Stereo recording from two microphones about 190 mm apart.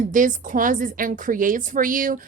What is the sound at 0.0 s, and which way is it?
A woman's voice, 40° right (ahead or behind).